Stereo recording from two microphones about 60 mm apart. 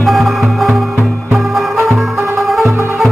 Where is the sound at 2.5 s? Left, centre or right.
Centre.